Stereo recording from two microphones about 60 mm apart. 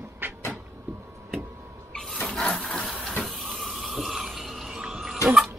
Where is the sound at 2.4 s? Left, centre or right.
Centre.